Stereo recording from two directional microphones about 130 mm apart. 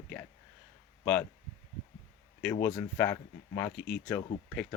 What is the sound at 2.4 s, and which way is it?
Speech, 15° left (ahead or behind).